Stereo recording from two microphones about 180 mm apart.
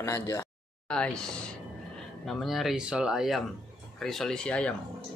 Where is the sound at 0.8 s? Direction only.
5° left (ahead or behind).